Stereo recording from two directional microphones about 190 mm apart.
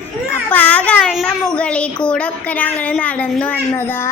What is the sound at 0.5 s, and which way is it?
A child's voice, 10° left (ahead or behind).